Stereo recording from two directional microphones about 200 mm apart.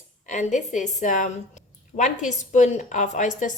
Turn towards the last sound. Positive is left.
turn(degrees=40)  # may be behind; listen again after turning